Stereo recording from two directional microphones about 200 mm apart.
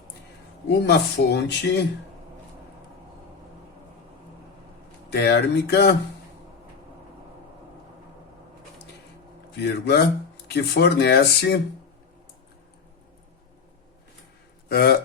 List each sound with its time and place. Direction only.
0.9 s speech: 55° left (ahead or behind)
5.1 s speech: 55° left (ahead or behind)
9.6 s speech: 55° left (ahead or behind)
14.7 s speech: 50° left (ahead or behind)